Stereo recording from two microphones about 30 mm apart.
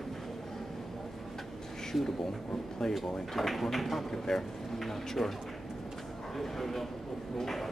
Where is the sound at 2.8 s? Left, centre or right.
Centre.